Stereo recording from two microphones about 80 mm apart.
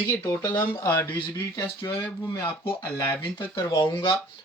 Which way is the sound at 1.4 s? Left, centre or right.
Left.